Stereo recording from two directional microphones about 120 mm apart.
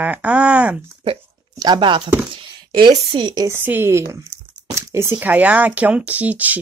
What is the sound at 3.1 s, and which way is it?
Speech, 40° right (ahead or behind).